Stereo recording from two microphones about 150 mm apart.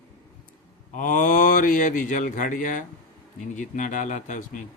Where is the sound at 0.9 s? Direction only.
60° left (ahead or behind).